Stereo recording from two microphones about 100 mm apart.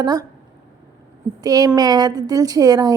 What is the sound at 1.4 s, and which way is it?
A woman's voice, 40° right (ahead or behind).